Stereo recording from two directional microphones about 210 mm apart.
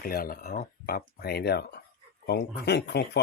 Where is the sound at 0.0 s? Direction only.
45° left (ahead or behind).